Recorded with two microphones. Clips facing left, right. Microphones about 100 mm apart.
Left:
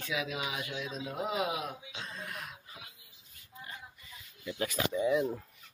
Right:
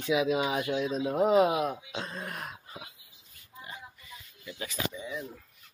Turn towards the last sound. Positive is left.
turn(degrees=65)  # may be behind; listen again after turning